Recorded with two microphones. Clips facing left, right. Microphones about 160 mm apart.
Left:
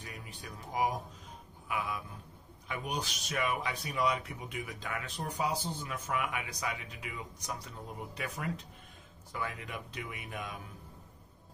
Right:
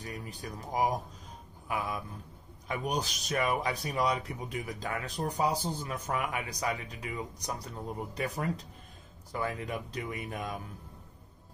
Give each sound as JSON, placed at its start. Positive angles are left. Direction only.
{"t": 0.0, "sound": "speech", "side_deg": -40}
{"t": 2.7, "sound": "speech", "side_deg": -40}